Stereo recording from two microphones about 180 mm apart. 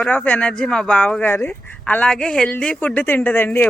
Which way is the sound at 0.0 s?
5° left (ahead or behind).